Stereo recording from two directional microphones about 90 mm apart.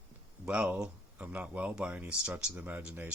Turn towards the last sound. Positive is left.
turn(degrees=-20)  # may be behind; listen again after turning